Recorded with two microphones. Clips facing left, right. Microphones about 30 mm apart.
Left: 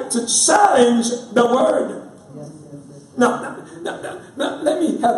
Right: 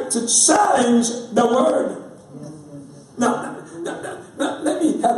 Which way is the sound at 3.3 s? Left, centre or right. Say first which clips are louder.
Even; centre.